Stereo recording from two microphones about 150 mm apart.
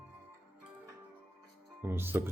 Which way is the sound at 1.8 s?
15° right (ahead or behind).